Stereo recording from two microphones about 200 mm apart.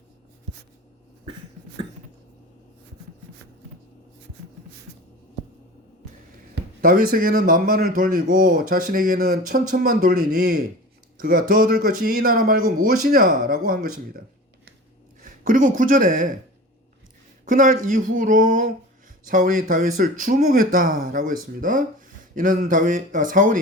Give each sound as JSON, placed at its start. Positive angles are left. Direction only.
{"t": 6.8, "sound": "speech", "side_deg": -45}
{"t": 11.2, "sound": "speech", "side_deg": -45}
{"t": 15.2, "sound": "speech", "side_deg": -40}
{"t": 17.4, "sound": "speech", "side_deg": -40}